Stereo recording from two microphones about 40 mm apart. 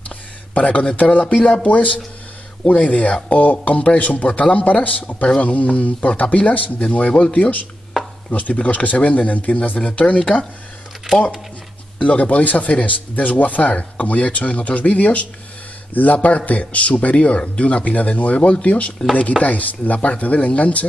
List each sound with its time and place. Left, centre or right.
0.6 s speech: left
8.3 s speech: left
12.0 s speech: left